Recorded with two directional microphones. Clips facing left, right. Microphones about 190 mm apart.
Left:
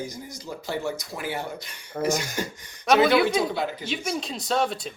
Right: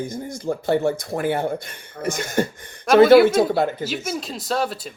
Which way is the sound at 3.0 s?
5° right (ahead or behind).